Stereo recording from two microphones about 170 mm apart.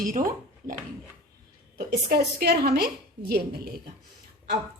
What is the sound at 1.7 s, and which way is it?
A woman's voice, 65° right (ahead or behind).